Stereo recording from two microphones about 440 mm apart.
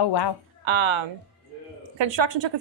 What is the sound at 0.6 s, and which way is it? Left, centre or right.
Speech, right.